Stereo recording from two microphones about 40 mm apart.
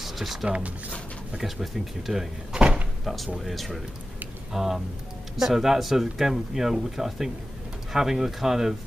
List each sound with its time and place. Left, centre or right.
0.0 s a sound: centre
0.5 s speech: right
1.4 s speech: centre
2.5 s door: right
3.3 s speech: centre
4.5 s speech: centre